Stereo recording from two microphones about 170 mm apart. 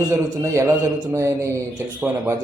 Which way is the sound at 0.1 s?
15° right (ahead or behind).